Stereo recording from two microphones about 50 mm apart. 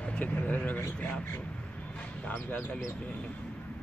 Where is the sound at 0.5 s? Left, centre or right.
Left.